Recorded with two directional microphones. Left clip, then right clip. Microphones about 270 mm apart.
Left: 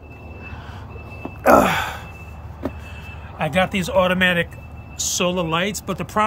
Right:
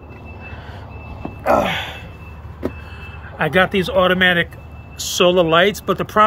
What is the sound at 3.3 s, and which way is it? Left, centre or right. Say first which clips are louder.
Speech: right 5 dB; centre.